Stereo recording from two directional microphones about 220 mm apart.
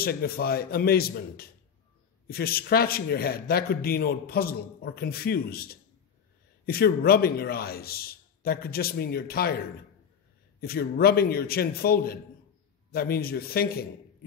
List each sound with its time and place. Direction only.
0.0 s a man's voice: 45° left (ahead or behind)
10.6 s a man's voice: 45° left (ahead or behind)